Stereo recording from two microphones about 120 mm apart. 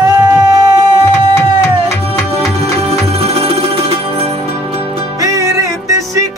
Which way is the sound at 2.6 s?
55° right (ahead or behind).